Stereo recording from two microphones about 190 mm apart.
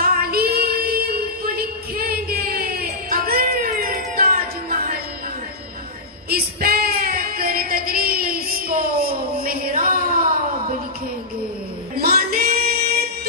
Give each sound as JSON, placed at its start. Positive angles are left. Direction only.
{"t": 0.0, "sound": "child singing", "side_deg": -50}
{"t": 0.5, "sound": "female singing", "side_deg": -55}
{"t": 6.3, "sound": "female singing", "side_deg": -50}
{"t": 11.9, "sound": "music", "side_deg": -50}